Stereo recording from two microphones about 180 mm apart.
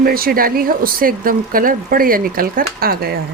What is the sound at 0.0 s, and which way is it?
Speech, 55° right (ahead or behind).